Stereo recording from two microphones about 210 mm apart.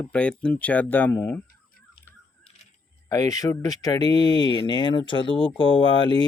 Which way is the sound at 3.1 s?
15° left (ahead or behind).